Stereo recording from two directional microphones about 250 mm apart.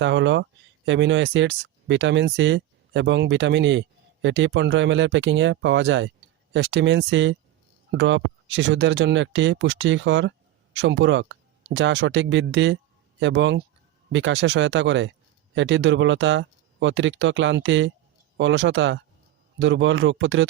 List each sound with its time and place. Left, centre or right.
0.0 s speech: right